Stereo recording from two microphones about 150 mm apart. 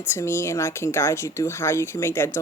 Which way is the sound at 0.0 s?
15° left (ahead or behind).